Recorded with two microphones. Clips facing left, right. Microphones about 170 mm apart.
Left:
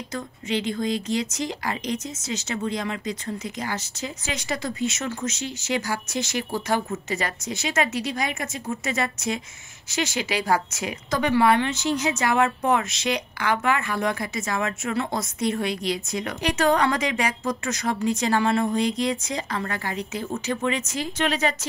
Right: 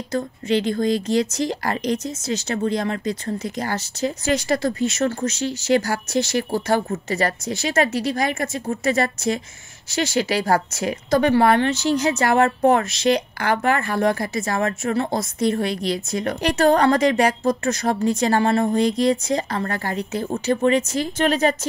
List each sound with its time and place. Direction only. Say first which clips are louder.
0.1 s speech: right 7 dB; 35° right (ahead or behind)